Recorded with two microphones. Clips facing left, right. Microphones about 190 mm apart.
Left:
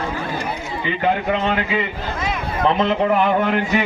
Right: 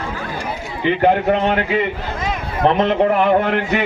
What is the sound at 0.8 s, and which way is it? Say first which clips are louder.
A man's voice: right 6 dB; 60° right (ahead or behind).